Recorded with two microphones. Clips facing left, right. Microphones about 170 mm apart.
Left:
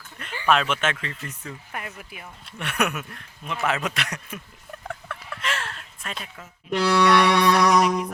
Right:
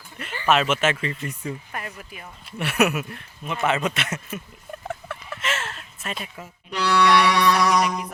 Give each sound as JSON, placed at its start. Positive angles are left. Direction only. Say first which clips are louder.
{"t": 0.4, "sound": "speech", "louder": "right 2 dB", "side_deg": -5}
{"t": 1.7, "sound": "speech", "louder": "right 1 dB", "side_deg": 10}
{"t": 2.6, "sound": "speech", "louder": "right 5 dB", "side_deg": -5}
{"t": 4.9, "sound": "a sound", "louder": "right 2 dB", "side_deg": -5}
{"t": 6.7, "sound": "music", "louder": "left 1 dB", "side_deg": 50}
{"t": 7.8, "sound": "speech", "louder": "left 3 dB", "side_deg": 0}